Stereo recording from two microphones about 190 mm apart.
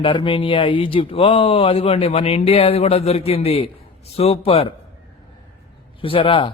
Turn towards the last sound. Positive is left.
turn(degrees=25)  # may be behind; listen again after turning